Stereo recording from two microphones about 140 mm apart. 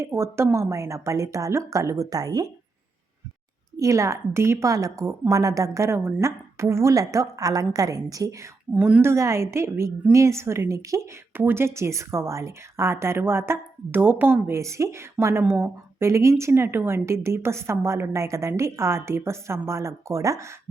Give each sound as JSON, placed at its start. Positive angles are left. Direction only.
{"t": 0.0, "sound": "a woman's voice", "side_deg": -20}
{"t": 3.8, "sound": "a woman's voice", "side_deg": -20}
{"t": 8.7, "sound": "a woman's voice", "side_deg": -10}